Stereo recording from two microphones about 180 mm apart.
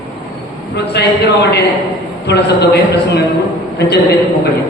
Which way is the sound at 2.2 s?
65° left (ahead or behind).